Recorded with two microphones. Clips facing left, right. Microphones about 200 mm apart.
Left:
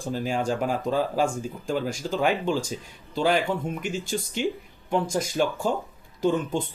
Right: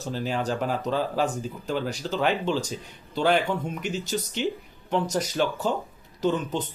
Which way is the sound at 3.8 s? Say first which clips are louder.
Even; 45° left (ahead or behind).